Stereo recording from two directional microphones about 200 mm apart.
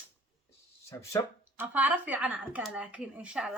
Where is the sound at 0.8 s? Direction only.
15° left (ahead or behind).